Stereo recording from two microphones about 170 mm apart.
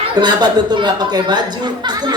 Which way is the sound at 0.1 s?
25° right (ahead or behind).